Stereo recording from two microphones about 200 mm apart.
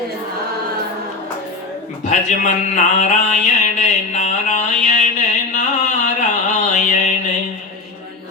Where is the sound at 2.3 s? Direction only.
40° left (ahead or behind).